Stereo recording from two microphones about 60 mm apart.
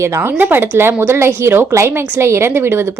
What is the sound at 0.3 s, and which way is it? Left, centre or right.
A woman's voice, right.